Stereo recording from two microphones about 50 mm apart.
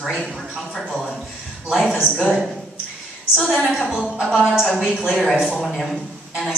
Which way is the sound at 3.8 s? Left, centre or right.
Centre.